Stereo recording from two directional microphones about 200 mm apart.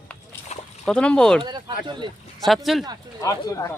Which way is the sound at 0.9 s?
5° left (ahead or behind).